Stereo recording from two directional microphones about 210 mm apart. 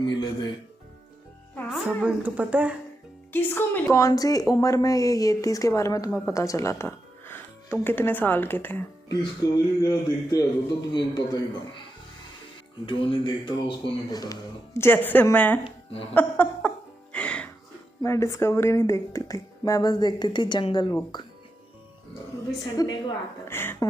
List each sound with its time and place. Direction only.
0.0 s music: 20° left (ahead or behind)
1.5 s a child's voice: 5° left (ahead or behind)
2.0 s speech: 5° right (ahead or behind)
3.3 s speech: 10° left (ahead or behind)
9.0 s music: 20° left (ahead or behind)
10.3 s speech: 20° left (ahead or behind)
12.8 s speech: 25° left (ahead or behind); by 15.5 s 10° left (ahead or behind)
15.6 s a woman's voice: 25° left (ahead or behind)
16.1 s music: 10° left (ahead or behind)
18.0 s speech: 15° left (ahead or behind)
22.8 s speech: 15° left (ahead or behind)